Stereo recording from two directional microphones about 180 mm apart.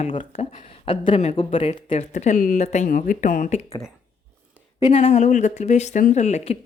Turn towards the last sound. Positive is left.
turn(degrees=35)  # may be behind; listen again after turning